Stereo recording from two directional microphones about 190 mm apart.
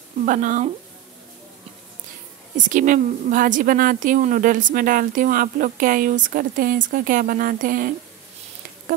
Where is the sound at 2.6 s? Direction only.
40° right (ahead or behind).